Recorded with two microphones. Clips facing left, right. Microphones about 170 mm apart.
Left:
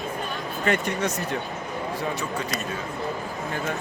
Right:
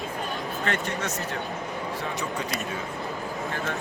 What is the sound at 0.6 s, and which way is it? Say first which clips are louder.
Speech: left 6 dB; 15° left (ahead or behind).